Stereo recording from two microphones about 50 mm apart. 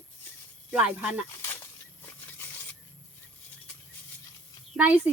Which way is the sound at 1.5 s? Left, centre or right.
Left.